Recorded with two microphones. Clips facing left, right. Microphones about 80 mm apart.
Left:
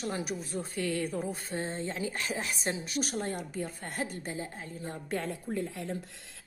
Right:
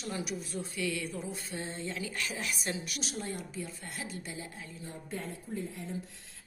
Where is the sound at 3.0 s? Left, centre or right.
Left.